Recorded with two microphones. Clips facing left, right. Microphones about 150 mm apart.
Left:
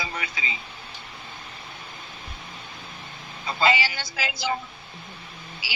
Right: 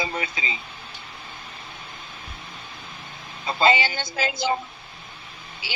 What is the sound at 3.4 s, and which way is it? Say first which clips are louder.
A woman's voice: right 3 dB; 25° right (ahead or behind).